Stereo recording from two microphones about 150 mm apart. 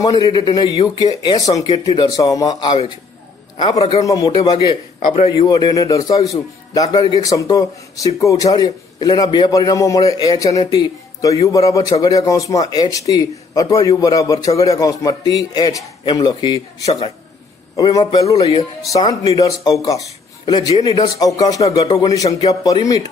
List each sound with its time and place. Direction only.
0.0 s a man's voice: 30° left (ahead or behind)
4.6 s a man's voice: 45° left (ahead or behind)
5.4 s a man's voice: 30° left (ahead or behind)
20.7 s a man's voice: 40° left (ahead or behind)
21.0 s a man's voice: 25° left (ahead or behind)